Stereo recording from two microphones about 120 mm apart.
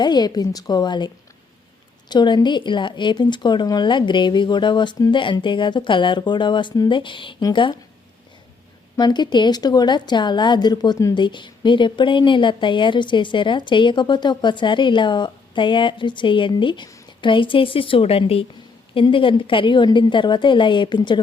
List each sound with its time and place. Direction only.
0.0 s a woman's voice: 35° left (ahead or behind)
9.0 s a woman's voice: 35° left (ahead or behind)